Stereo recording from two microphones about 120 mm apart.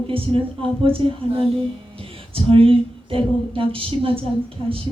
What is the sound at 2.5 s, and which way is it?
A woman's voice, 50° right (ahead or behind).